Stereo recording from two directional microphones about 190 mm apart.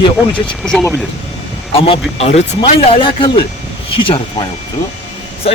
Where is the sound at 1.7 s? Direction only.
30° left (ahead or behind).